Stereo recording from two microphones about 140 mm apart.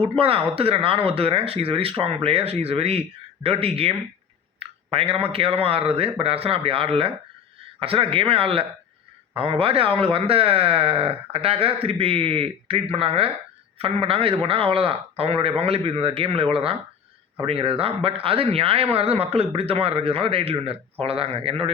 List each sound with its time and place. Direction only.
0.0 s a man's voice: 40° right (ahead or behind)